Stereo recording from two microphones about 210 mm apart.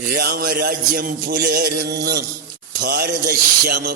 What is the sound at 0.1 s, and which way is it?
Music, 45° right (ahead or behind).